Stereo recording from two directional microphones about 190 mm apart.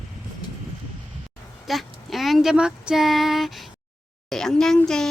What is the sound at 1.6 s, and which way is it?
Speech, centre (ahead or behind).